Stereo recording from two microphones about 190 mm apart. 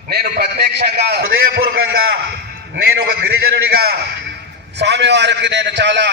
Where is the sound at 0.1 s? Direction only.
55° right (ahead or behind).